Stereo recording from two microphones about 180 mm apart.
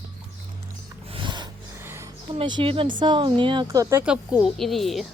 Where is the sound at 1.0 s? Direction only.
30° right (ahead or behind).